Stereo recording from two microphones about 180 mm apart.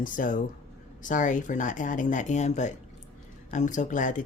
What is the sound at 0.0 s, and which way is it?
Speech, 50° left (ahead or behind).